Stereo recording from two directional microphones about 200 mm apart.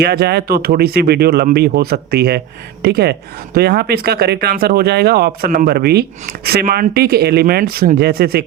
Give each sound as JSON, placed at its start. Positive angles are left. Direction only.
{"t": 0.0, "sound": "speech", "side_deg": -55}